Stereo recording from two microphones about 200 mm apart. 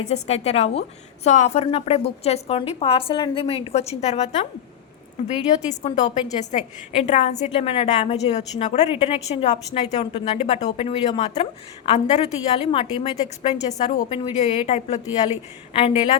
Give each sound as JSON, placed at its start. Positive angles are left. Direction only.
{"t": 0.1, "sound": "a woman's voice", "side_deg": 30}
{"t": 5.6, "sound": "a woman's voice", "side_deg": 35}